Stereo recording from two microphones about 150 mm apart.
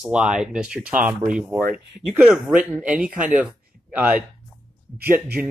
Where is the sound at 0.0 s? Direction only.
5° right (ahead or behind).